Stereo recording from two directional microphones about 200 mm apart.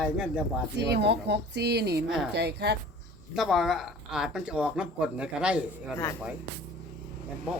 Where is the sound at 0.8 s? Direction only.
55° right (ahead or behind).